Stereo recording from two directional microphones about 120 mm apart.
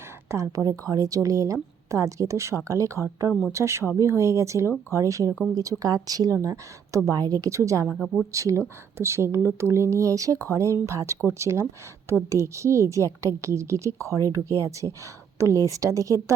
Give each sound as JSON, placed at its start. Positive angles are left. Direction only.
{"t": 0.3, "sound": "speech", "side_deg": -25}
{"t": 7.9, "sound": "speech", "side_deg": 0}
{"t": 8.3, "sound": "speech", "side_deg": -25}